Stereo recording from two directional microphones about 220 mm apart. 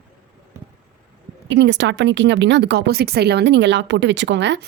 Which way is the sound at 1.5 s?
55° right (ahead or behind).